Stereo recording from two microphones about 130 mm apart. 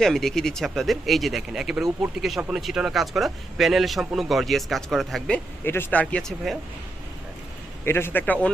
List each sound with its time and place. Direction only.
0.0 s a man's voice: 5° left (ahead or behind)
5.6 s speech: 15° left (ahead or behind)
7.9 s speech: 20° left (ahead or behind)